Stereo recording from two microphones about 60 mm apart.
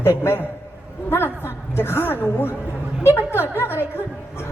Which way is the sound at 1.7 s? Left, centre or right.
Left.